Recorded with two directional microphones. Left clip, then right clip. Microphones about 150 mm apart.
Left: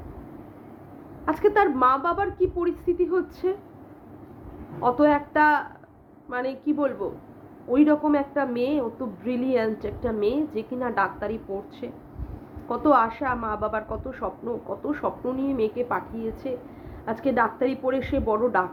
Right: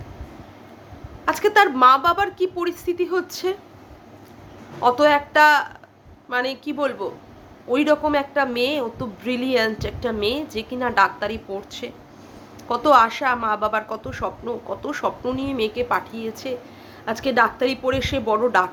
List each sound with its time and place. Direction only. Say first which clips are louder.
1.2 s a woman's voice: right 4 dB; 10° right (ahead or behind)
4.8 s a woman's voice: right 4 dB; 15° right (ahead or behind)